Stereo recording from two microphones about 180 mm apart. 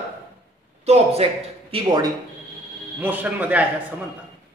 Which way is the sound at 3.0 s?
10° right (ahead or behind).